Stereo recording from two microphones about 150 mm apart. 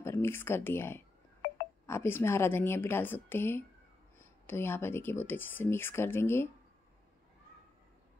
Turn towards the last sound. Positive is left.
turn(degrees=15)  # may be behind; listen again after turning